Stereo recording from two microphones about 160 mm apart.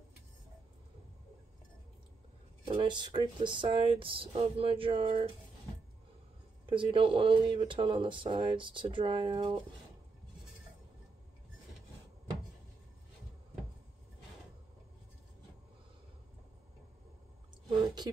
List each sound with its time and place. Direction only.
2.7 s speech: 30° right (ahead or behind)
6.6 s speech: 30° right (ahead or behind)